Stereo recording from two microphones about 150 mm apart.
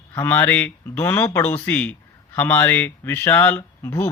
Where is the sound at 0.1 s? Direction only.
15° left (ahead or behind).